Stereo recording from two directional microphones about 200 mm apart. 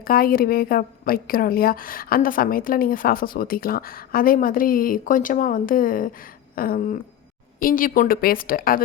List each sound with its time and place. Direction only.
0.0 s a woman's voice: 45° left (ahead or behind)